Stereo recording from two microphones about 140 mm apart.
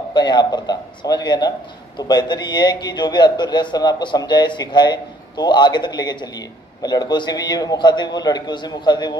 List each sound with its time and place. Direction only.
0.1 s a man's voice: 30° left (ahead or behind)